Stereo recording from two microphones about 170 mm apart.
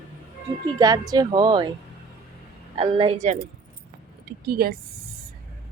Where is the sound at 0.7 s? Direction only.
20° right (ahead or behind).